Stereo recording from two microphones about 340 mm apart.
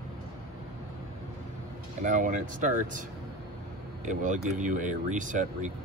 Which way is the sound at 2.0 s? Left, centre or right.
Right.